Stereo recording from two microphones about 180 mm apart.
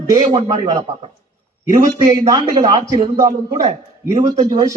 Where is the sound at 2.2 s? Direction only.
25° right (ahead or behind).